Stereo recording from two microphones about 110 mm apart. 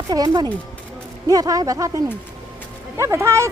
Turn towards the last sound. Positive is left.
turn(degrees=-25)  # may be behind; listen again after turning